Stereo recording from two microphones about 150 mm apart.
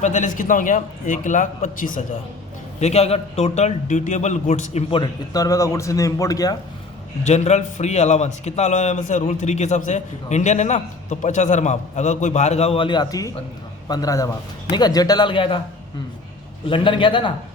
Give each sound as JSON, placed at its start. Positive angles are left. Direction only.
{"t": 0.0, "sound": "a man's voice", "side_deg": 55}
{"t": 2.8, "sound": "a man's voice", "side_deg": 45}
{"t": 5.3, "sound": "a man's voice", "side_deg": 25}
{"t": 7.3, "sound": "a man's voice", "side_deg": 50}
{"t": 16.6, "sound": "a man's voice", "side_deg": 35}